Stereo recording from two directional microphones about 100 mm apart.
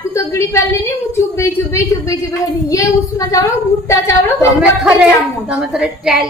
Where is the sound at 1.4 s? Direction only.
30° left (ahead or behind).